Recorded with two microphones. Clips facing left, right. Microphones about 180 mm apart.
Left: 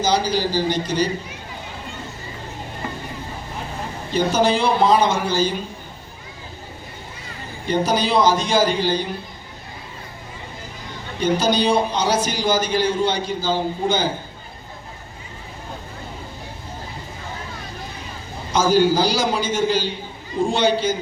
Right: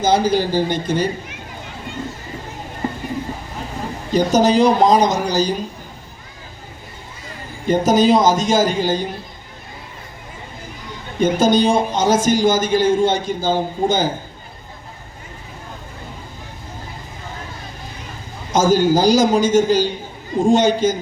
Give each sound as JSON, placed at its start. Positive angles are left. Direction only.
{"t": 0.0, "sound": "a man's voice", "side_deg": -50}
{"t": 4.1, "sound": "speech", "side_deg": -40}
{"t": 7.7, "sound": "a man's voice", "side_deg": -45}
{"t": 11.2, "sound": "a man's voice", "side_deg": -50}
{"t": 18.5, "sound": "a man's voice", "side_deg": -45}